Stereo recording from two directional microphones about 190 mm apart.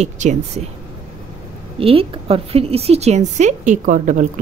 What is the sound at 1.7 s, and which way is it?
Speech, 30° right (ahead or behind).